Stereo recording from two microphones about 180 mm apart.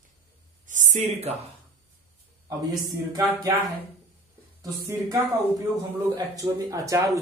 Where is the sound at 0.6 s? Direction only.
45° right (ahead or behind).